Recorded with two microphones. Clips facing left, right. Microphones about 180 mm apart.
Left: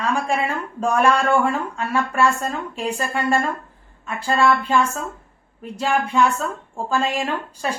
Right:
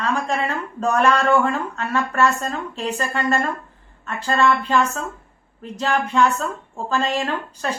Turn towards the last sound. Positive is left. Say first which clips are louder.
# even
turn(degrees=10)  # may be behind; listen again after turning